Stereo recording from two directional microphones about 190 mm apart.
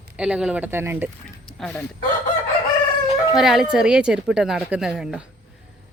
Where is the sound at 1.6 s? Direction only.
5° left (ahead or behind).